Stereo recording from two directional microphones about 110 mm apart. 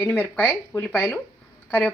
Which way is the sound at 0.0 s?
15° left (ahead or behind).